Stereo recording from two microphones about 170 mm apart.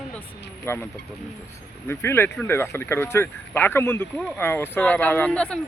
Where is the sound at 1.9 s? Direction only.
15° left (ahead or behind).